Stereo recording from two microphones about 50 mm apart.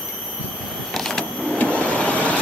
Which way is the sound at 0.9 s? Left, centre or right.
Centre.